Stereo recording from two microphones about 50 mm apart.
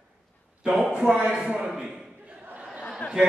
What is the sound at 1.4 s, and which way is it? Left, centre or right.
Speech, centre.